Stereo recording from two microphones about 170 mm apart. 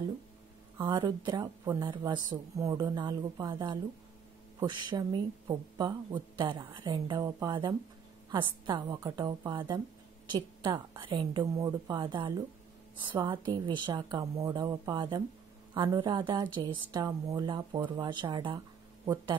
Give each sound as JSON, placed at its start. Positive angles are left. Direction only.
{"t": 0.7, "sound": "speech", "side_deg": -30}